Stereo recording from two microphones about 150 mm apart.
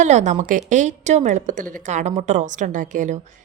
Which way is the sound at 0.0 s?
50° right (ahead or behind).